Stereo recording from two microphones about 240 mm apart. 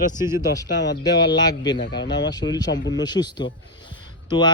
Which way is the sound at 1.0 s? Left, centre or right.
Centre.